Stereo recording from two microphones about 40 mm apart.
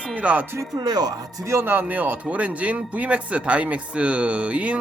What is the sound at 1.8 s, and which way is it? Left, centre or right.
Speech, right.